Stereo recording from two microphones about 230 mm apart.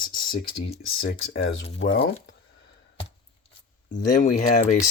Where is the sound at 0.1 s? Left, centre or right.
Left.